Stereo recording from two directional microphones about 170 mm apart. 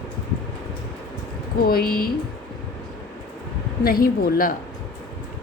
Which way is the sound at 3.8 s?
60° left (ahead or behind).